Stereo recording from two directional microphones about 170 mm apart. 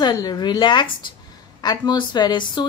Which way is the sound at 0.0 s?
25° left (ahead or behind).